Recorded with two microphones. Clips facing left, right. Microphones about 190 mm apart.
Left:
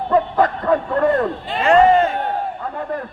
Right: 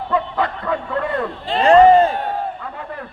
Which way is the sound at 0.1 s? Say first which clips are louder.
Left 5 dB; 45° left (ahead or behind).